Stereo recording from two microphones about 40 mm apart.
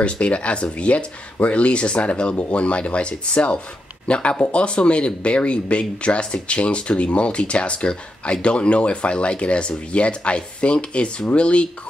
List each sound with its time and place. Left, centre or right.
0.0 s speech: left